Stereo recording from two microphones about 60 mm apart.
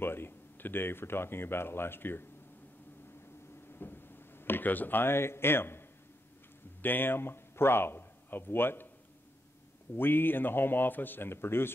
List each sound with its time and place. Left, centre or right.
0.0 s speech: left
3.7 s a man's voice: left
9.9 s speech: left